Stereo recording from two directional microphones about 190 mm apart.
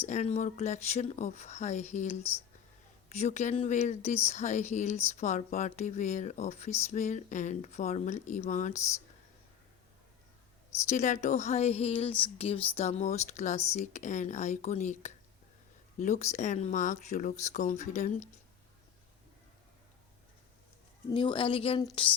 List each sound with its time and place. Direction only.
0.0 s speech: 35° left (ahead or behind)
10.8 s speech: 40° left (ahead or behind)
21.1 s a woman's voice: 25° left (ahead or behind)